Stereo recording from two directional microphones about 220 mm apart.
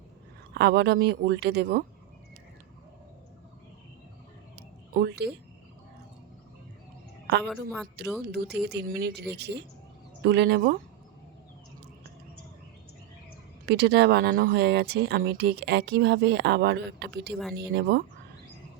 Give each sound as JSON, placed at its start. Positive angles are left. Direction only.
{"t": 0.5, "sound": "speech", "side_deg": -50}
{"t": 4.5, "sound": "a sound", "side_deg": -45}
{"t": 7.4, "sound": "a woman's voice", "side_deg": 0}
{"t": 8.4, "sound": "speech", "side_deg": -50}
{"t": 13.7, "sound": "speech", "side_deg": -50}